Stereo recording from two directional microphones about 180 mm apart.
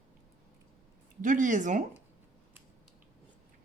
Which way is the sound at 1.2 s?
45° right (ahead or behind).